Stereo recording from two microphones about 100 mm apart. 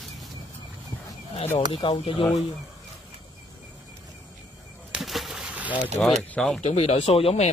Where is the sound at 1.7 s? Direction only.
65° left (ahead or behind).